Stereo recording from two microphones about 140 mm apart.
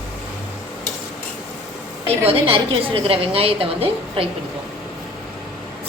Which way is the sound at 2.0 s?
45° right (ahead or behind).